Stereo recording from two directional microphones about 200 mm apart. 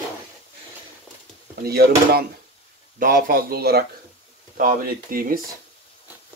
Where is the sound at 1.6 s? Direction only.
50° right (ahead or behind).